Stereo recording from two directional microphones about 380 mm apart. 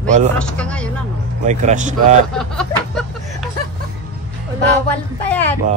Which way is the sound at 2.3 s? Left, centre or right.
Centre.